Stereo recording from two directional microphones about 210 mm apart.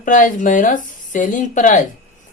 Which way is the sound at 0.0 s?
40° left (ahead or behind).